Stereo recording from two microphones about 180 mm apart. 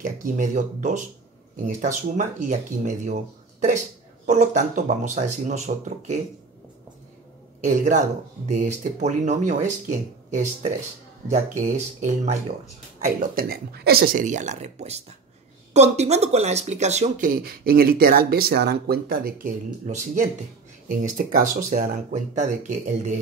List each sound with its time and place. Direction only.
0.2 s speech: 45° right (ahead or behind)
4.3 s speech: 40° right (ahead or behind)
7.6 s speech: 45° right (ahead or behind)
13.0 s speech: 55° right (ahead or behind)